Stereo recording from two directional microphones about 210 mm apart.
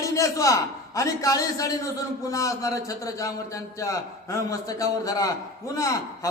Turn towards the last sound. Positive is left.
turn(degrees=15)  # may be behind; listen again after turning